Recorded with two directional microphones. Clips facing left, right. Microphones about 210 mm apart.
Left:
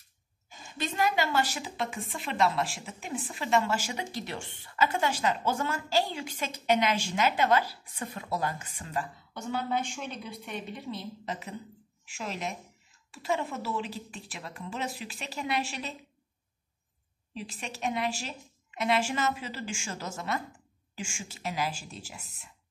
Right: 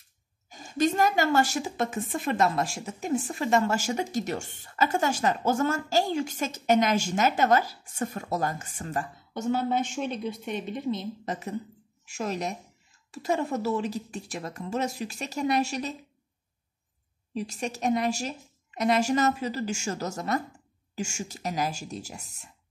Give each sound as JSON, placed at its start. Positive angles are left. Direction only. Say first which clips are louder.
{"t": 0.5, "sound": "a woman's voice", "louder": "right 11 dB", "side_deg": -45}
{"t": 10.8, "sound": "a woman's voice", "louder": "right 8 dB", "side_deg": -20}
{"t": 11.2, "sound": "a woman's voice", "louder": "right 5 dB", "side_deg": -45}
{"t": 17.3, "sound": "a woman's voice", "louder": "right 8 dB", "side_deg": -45}